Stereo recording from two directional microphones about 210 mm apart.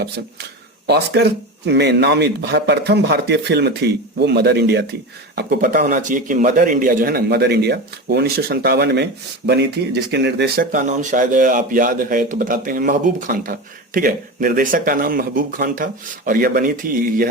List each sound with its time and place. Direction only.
0.9 s speech: 50° right (ahead or behind)